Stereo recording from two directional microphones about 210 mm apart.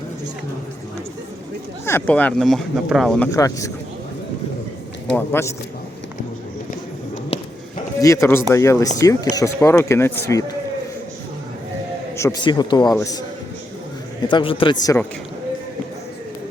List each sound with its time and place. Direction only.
1.8 s speech: 10° left (ahead or behind)
3.3 s speech: 15° left (ahead or behind)
5.1 s speech: 10° left (ahead or behind)
8.0 s speech: 15° left (ahead or behind)
12.1 s a man's voice: 15° left (ahead or behind)
14.3 s a man's voice: 25° left (ahead or behind)